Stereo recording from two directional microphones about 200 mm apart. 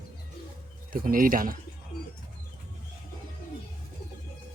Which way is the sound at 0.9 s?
45° right (ahead or behind).